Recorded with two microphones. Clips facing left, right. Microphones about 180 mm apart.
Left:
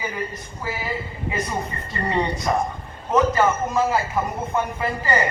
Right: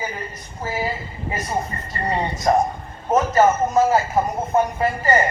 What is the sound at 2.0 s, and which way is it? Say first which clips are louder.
A man's voice: right 2 dB; 40° right (ahead or behind).